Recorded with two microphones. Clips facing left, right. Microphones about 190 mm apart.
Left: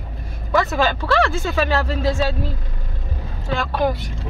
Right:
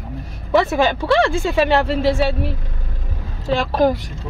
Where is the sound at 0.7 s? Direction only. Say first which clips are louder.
Right 3 dB; 20° right (ahead or behind).